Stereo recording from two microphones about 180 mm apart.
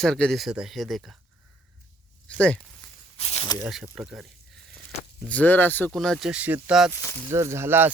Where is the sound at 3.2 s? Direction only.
35° left (ahead or behind).